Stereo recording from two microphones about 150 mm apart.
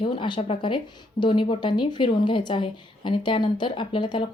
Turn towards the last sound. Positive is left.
turn(degrees=30)  # may be behind; listen again after turning